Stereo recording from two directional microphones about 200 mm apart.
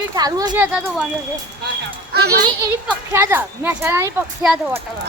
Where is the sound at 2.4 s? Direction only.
20° right (ahead or behind); by 4.7 s 5° right (ahead or behind).